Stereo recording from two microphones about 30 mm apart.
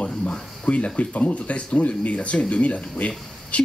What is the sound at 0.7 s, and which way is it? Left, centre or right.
Speech, left.